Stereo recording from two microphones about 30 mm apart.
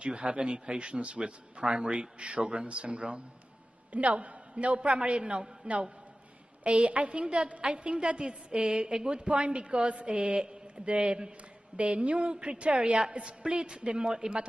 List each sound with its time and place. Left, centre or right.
0.0 s a woman's voice: right
1.6 s speech: right
1.9 s a woman's voice: right
3.9 s a man's voice: right
4.7 s a woman's voice: right
7.6 s a woman's voice: right
9.2 s a woman's voice: right